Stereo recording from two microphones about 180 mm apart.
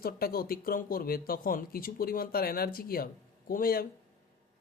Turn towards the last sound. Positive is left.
turn(degrees=55)  # may be behind; listen again after turning